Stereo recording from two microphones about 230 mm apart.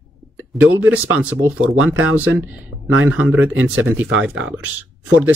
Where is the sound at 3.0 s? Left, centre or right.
Centre.